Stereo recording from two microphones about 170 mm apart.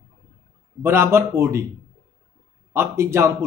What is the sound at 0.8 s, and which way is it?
Speech, 15° right (ahead or behind).